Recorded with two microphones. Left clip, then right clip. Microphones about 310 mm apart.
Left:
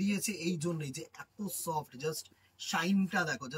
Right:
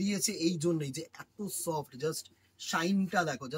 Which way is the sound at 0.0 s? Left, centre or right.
Centre.